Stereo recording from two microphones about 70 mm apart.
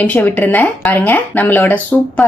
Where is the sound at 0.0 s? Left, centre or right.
Left.